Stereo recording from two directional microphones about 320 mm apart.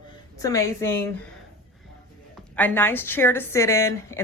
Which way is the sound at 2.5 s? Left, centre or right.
Centre.